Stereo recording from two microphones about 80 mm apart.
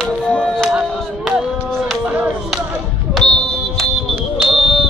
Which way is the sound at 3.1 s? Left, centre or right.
Centre.